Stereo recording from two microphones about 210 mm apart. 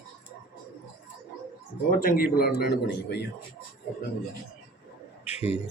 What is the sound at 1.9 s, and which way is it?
Speech, 45° left (ahead or behind).